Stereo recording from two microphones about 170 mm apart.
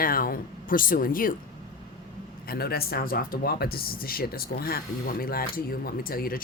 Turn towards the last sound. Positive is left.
turn(degrees=60)  # may be behind; listen again after turning